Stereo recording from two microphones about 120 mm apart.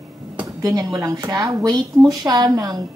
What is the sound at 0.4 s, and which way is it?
A woman's voice, 30° right (ahead or behind).